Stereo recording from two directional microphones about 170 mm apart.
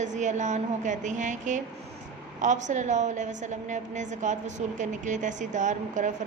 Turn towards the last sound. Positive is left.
turn(degrees=-45)  # may be behind; listen again after turning